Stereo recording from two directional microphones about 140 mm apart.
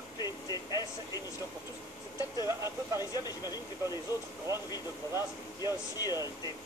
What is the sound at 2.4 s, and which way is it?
Speech, 20° right (ahead or behind).